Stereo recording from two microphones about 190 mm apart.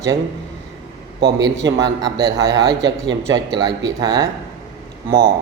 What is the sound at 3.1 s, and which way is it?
Speech, 80° right.